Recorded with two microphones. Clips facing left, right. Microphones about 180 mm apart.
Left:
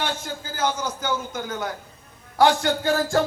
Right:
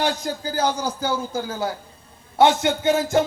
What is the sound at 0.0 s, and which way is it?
A man's voice, 35° right (ahead or behind).